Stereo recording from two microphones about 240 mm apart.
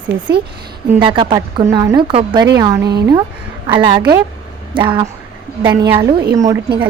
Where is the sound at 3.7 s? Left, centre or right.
Centre.